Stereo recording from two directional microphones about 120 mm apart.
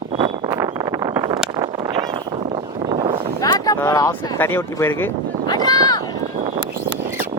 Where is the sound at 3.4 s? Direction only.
30° left (ahead or behind).